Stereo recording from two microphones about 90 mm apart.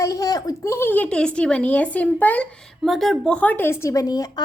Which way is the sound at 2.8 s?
Centre (ahead or behind).